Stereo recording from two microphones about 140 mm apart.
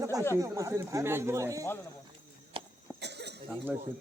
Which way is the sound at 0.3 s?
25° right (ahead or behind).